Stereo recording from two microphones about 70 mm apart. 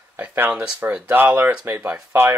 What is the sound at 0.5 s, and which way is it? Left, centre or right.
Speech, centre.